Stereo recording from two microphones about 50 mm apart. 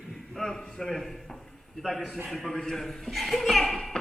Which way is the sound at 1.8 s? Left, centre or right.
Centre.